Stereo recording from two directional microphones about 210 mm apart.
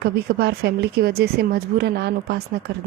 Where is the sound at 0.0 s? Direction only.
50° right (ahead or behind).